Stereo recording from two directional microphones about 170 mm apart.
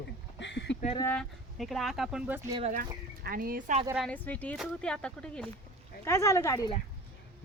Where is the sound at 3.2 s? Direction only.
60° right (ahead or behind).